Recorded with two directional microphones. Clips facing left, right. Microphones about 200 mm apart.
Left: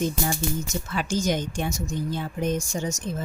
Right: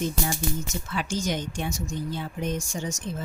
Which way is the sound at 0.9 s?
45° left (ahead or behind).